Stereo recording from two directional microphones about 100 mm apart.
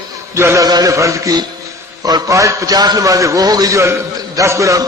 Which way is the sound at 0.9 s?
30° right (ahead or behind).